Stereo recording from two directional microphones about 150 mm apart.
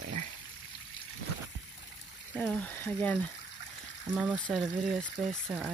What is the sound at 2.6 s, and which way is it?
Speech, 10° left (ahead or behind).